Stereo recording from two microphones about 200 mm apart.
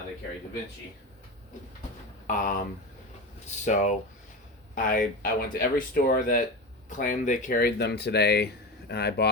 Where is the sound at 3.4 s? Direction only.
35° left (ahead or behind).